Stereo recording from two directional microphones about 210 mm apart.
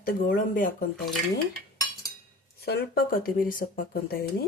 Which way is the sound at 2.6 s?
45° left (ahead or behind).